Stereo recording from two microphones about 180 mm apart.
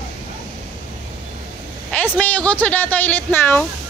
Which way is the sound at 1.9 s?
10° left (ahead or behind).